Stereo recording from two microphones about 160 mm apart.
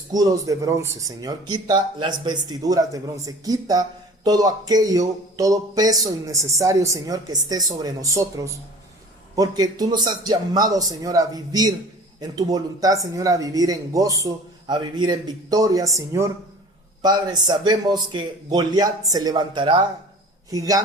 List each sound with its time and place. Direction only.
0.1 s speech: 20° right (ahead or behind)